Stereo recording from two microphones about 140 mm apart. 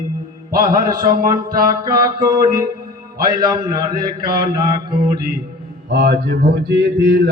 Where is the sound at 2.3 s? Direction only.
90° right.